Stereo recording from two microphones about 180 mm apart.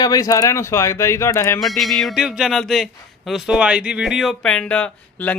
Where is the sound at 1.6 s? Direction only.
Centre (ahead or behind).